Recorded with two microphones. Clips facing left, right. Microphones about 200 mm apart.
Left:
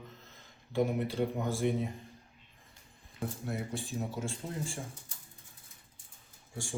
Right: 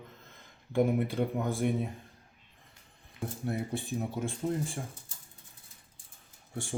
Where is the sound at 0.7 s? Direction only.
55° right (ahead or behind).